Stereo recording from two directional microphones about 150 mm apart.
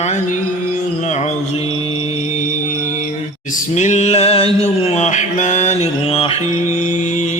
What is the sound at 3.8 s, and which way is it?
Mantra, 50° left (ahead or behind).